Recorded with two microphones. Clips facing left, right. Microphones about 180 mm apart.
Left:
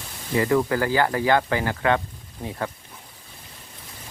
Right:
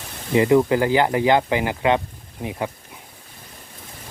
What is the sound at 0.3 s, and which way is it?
Speech, 20° right (ahead or behind).